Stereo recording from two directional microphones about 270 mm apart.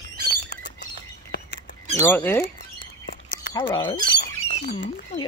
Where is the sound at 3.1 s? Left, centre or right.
Left.